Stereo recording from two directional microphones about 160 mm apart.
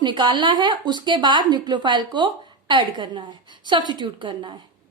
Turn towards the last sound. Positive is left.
turn(degrees=-30)  # may be behind; listen again after turning